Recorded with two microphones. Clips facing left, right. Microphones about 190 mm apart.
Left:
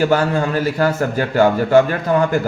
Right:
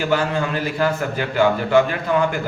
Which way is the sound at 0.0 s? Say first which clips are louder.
Left 4 dB; 40° left (ahead or behind).